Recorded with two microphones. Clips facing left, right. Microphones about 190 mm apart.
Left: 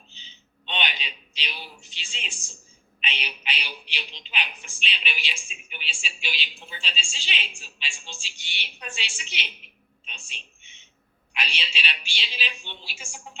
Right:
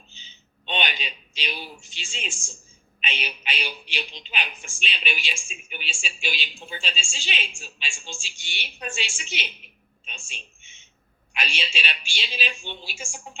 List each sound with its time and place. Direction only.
0.1 s a man's voice: 45° right (ahead or behind)
10.1 s a sound: 45° right (ahead or behind)
11.3 s a woman's voice: 45° right (ahead or behind)